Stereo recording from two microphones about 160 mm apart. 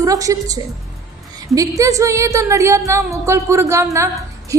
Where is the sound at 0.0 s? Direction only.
20° right (ahead or behind).